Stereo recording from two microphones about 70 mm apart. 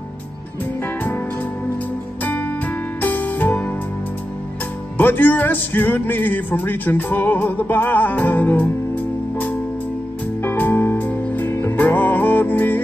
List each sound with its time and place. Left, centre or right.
3.0 s music: left
4.9 s music: left
10.4 s music: left